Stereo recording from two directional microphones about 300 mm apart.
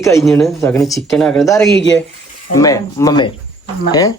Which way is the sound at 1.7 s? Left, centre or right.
Left.